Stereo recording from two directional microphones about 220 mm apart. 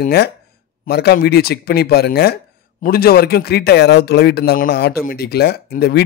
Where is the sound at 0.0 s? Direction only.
45° left (ahead or behind).